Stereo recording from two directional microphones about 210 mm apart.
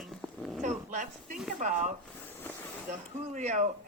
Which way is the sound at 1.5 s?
35° right (ahead or behind).